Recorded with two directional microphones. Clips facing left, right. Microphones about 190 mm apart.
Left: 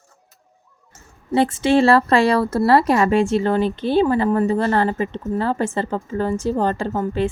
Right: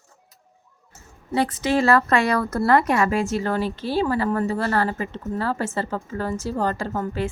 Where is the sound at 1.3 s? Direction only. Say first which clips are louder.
Left 5 dB; 25° left (ahead or behind).